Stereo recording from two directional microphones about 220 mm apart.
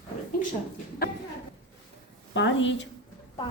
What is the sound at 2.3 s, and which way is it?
Speech, 55° left (ahead or behind).